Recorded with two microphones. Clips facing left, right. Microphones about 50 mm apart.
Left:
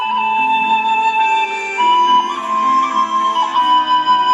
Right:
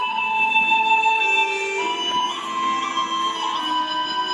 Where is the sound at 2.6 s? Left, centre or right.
Left.